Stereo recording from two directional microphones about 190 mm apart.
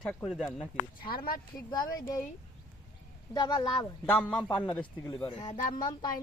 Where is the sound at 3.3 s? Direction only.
25° left (ahead or behind).